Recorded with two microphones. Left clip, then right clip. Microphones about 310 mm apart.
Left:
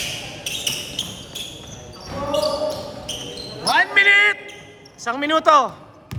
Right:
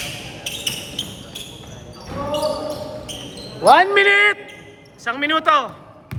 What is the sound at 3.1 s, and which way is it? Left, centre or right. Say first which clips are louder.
Basketball bounce: left 2 dB; centre.